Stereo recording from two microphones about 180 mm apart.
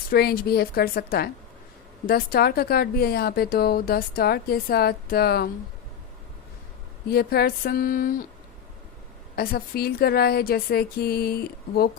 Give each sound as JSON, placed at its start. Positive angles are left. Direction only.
{"t": 0.1, "sound": "a woman's voice", "side_deg": 60}
{"t": 7.1, "sound": "a woman's voice", "side_deg": 60}
{"t": 9.3, "sound": "a woman's voice", "side_deg": 55}